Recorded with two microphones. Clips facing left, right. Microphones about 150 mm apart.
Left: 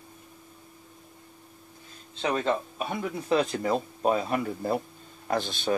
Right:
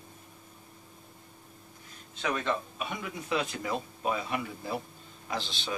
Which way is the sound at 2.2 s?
30° left (ahead or behind).